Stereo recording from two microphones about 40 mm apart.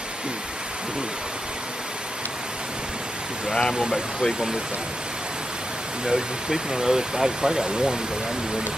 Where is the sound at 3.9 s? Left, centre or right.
Centre.